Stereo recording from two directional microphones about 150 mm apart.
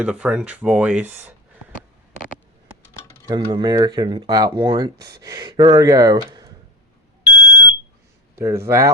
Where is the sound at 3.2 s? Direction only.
30° right (ahead or behind).